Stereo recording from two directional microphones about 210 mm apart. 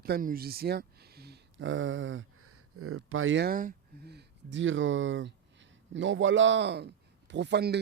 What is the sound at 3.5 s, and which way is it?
Speech, 45° right (ahead or behind).